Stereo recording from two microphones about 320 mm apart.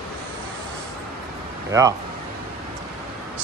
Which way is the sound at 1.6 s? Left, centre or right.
Centre.